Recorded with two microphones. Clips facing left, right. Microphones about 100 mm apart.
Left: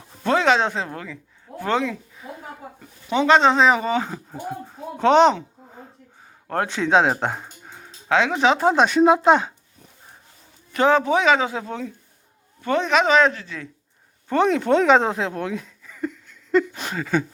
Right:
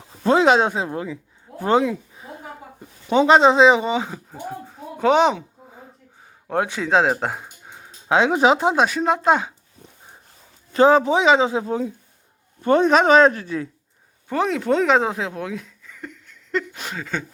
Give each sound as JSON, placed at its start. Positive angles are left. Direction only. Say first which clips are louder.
{"t": 0.4, "sound": "speech", "louder": "right 3 dB", "side_deg": -15}
{"t": 1.5, "sound": "a sound", "louder": "left 1 dB", "side_deg": 40}
{"t": 1.8, "sound": "speech", "louder": "right 4 dB", "side_deg": -20}
{"t": 3.4, "sound": "speech", "louder": "right 3 dB", "side_deg": -5}
{"t": 3.8, "sound": "speech", "louder": "even", "side_deg": -15}
{"t": 4.1, "sound": "speech", "louder": "left 1 dB", "side_deg": 0}
{"t": 6.5, "sound": "speech", "louder": "even", "side_deg": -5}
{"t": 10.7, "sound": "a man's voice", "louder": "right 3 dB", "side_deg": -30}
{"t": 12.6, "sound": "speech", "louder": "right 4 dB", "side_deg": -40}
{"t": 14.3, "sound": "speech", "louder": "left 2 dB", "side_deg": 0}
{"t": 15.9, "sound": "a sound", "louder": "left 11 dB", "side_deg": 10}
{"t": 16.7, "sound": "speech", "louder": "left 5 dB", "side_deg": 0}